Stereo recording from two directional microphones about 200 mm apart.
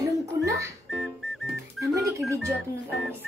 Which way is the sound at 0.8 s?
Centre (ahead or behind).